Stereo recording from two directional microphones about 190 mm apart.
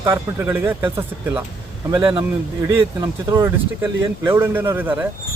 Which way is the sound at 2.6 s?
15° right (ahead or behind).